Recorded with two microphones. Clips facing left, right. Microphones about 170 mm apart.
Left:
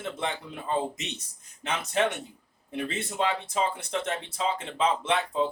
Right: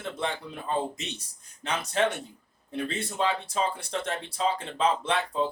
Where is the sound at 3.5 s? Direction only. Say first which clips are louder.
Left 1 dB; 15° left (ahead or behind).